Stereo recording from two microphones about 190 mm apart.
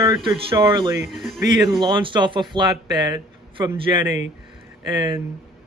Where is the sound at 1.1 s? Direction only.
Centre (ahead or behind).